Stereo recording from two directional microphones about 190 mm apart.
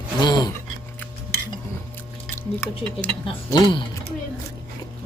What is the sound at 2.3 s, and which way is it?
Speech, 10° left (ahead or behind).